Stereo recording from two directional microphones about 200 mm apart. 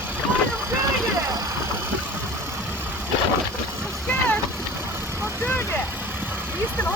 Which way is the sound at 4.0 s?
5° left (ahead or behind).